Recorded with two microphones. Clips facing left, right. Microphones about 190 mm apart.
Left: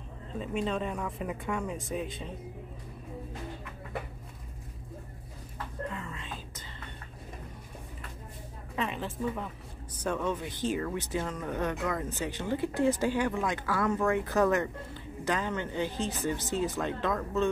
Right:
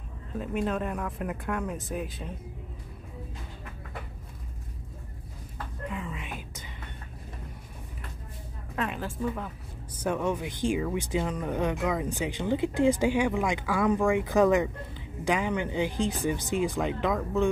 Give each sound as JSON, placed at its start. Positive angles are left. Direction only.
{"t": 0.4, "sound": "speech", "side_deg": -5}
{"t": 5.9, "sound": "whispering", "side_deg": -15}
{"t": 8.7, "sound": "speech", "side_deg": 0}
{"t": 10.0, "sound": "speech", "side_deg": -10}